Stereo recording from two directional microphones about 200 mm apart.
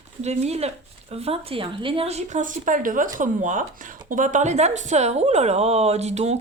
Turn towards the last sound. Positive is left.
turn(degrees=-35)  # may be behind; listen again after turning